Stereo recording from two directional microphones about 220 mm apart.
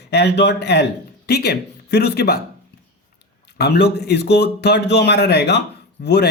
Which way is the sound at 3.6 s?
50° left (ahead or behind).